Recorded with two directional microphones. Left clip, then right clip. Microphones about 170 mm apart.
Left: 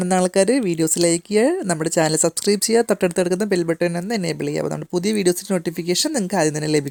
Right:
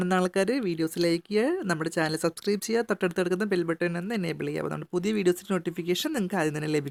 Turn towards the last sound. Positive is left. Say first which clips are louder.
# left 8 dB
turn(degrees=35)  # may be behind; listen again after turning